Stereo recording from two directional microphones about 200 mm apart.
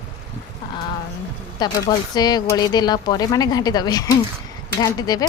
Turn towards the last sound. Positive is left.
turn(degrees=20)  # may be behind; listen again after turning